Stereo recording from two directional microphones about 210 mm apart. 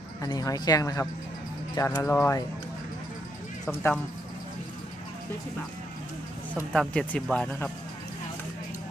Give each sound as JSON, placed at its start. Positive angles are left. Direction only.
{"t": 0.2, "sound": "speech", "side_deg": 15}
{"t": 3.7, "sound": "speech", "side_deg": 10}
{"t": 6.7, "sound": "speech", "side_deg": 5}